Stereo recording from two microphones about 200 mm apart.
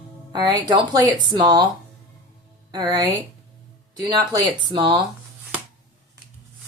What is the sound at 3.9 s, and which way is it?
Speech, 20° right (ahead or behind).